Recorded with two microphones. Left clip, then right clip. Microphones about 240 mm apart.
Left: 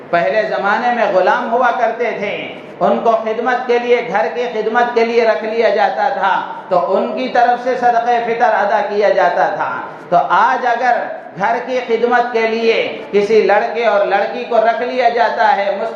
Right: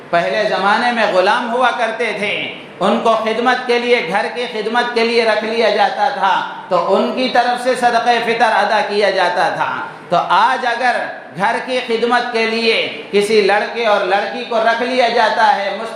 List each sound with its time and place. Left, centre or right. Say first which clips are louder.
0.1 s a man's voice: left 1 dB; right